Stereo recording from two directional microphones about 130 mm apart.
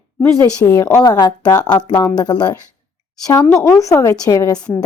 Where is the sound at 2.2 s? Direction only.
30° left (ahead or behind).